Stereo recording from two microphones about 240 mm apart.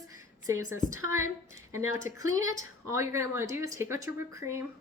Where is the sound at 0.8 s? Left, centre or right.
Centre.